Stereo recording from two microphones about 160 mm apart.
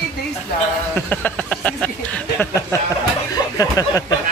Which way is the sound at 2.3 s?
20° left (ahead or behind).